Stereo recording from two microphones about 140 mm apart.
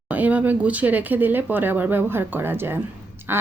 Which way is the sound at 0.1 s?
10° right (ahead or behind).